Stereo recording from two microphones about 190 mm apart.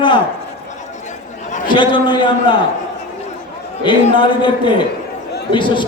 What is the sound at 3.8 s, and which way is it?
A man's voice, 25° left (ahead or behind).